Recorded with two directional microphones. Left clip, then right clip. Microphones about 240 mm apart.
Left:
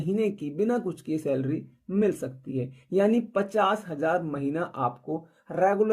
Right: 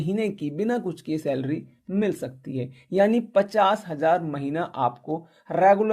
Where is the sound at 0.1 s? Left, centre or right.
Right.